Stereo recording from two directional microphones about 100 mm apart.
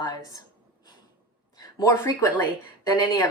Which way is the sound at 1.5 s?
40° left (ahead or behind).